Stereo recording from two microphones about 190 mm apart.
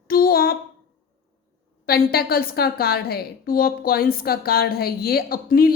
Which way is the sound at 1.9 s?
50° left (ahead or behind).